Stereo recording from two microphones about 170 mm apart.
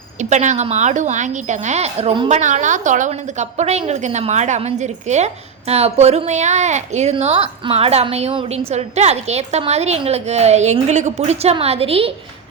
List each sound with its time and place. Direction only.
0.2 s a woman's voice: 45° right (ahead or behind)
2.3 s a woman's voice: 45° right (ahead or behind)